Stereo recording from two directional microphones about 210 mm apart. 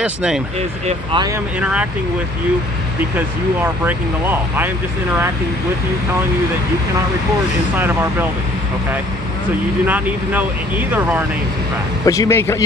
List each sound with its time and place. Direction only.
0.0 s speech: 5° right (ahead or behind)
0.8 s speech: 20° right (ahead or behind)
1.6 s speech: 5° right (ahead or behind)
3.8 s speech: 10° right (ahead or behind)
7.8 s speech: 10° right (ahead or behind)
9.8 s speech: 10° right (ahead or behind)
12.0 s speech: 15° left (ahead or behind)